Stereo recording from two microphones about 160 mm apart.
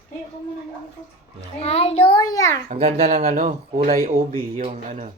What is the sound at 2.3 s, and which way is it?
Speech, 20° left (ahead or behind).